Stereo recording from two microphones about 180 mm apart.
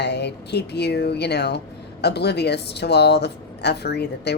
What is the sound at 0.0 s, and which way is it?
Speech, 70° left (ahead or behind).